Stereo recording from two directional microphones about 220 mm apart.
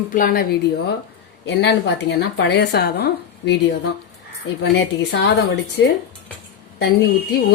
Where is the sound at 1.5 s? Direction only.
50° left (ahead or behind).